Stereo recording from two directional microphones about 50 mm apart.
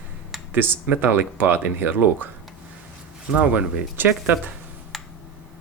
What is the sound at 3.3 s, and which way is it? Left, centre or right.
Speech, right.